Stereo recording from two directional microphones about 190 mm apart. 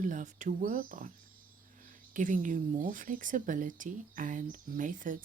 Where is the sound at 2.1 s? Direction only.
45° right (ahead or behind).